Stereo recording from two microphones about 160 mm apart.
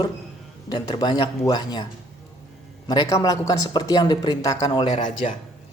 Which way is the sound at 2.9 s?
20° left (ahead or behind).